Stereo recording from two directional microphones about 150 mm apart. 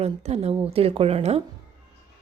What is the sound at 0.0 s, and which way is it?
A woman's voice, 45° right (ahead or behind).